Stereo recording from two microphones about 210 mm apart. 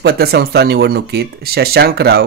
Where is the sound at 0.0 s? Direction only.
50° right (ahead or behind).